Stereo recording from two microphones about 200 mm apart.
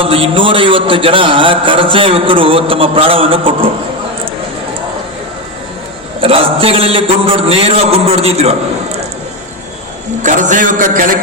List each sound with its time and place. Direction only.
0.0 s a man's voice: 30° right (ahead or behind)
6.1 s a man's voice: 30° right (ahead or behind)
10.2 s a man's voice: 40° right (ahead or behind)